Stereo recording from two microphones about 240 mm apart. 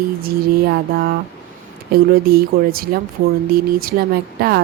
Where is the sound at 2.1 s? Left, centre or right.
Right.